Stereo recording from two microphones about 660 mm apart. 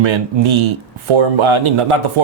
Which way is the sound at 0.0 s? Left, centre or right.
Right.